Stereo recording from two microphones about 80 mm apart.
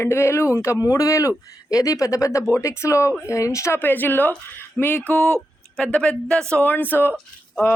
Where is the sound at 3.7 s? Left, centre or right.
Left.